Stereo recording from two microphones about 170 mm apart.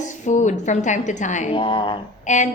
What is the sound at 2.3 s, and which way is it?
Speech, 45° left (ahead or behind).